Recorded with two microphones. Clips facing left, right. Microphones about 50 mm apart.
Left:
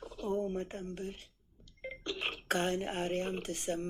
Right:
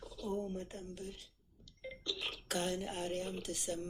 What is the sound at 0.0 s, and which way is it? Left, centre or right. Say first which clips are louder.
Speech: left 5 dB; left.